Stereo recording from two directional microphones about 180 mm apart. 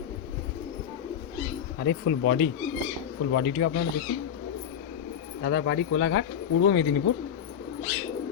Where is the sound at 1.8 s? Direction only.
70° left (ahead or behind).